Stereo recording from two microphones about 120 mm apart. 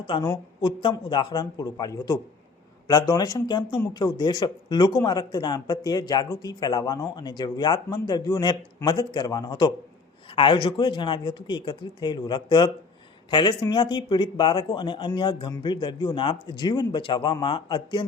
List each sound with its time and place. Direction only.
0.0 s speech: 40° left (ahead or behind)